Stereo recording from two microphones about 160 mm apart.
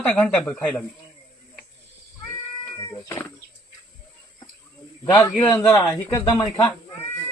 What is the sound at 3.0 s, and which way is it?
Speech, 15° left (ahead or behind).